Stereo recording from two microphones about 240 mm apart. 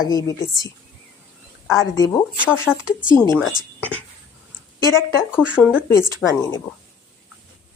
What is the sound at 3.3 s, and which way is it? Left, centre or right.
Speech, centre.